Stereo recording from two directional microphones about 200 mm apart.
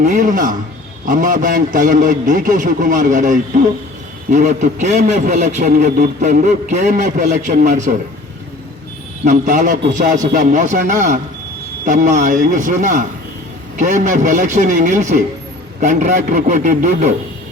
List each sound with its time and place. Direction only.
0.0 s a man's voice: 40° right (ahead or behind)
9.2 s a man's voice: 40° right (ahead or behind)